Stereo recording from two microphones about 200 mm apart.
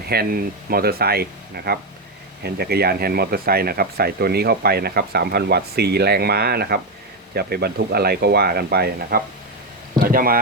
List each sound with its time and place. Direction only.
0.1 s speech: 50° right (ahead or behind)